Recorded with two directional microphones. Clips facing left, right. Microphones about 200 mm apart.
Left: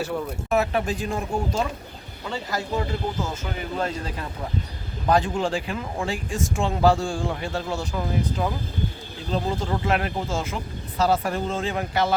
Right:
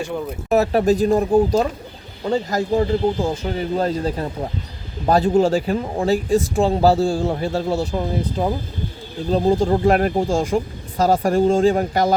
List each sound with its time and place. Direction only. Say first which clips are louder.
0.5 s speech: right 8 dB; 40° right (ahead or behind)